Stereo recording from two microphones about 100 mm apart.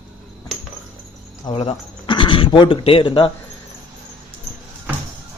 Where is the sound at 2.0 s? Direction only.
55° left (ahead or behind).